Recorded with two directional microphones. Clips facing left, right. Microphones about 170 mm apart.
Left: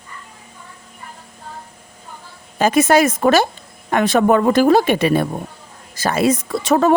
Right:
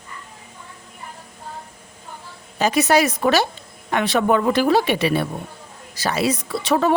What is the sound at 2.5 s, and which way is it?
Speech, 50° left (ahead or behind).